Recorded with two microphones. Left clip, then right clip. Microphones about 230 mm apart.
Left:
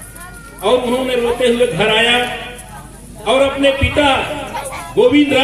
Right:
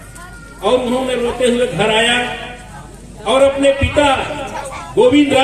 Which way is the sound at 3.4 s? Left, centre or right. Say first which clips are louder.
Right 2 dB; left.